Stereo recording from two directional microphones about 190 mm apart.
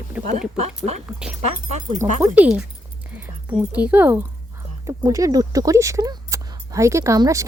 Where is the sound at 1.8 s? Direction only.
40° right (ahead or behind).